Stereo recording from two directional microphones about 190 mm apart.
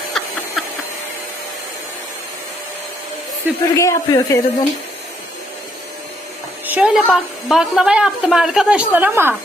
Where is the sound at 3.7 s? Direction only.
15° left (ahead or behind).